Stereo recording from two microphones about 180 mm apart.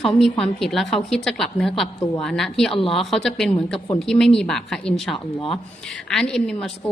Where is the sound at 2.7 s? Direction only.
30° left (ahead or behind).